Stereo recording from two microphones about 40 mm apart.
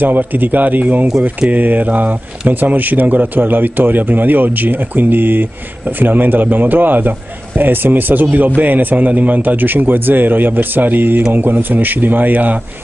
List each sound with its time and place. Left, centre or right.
0.0 s speech: right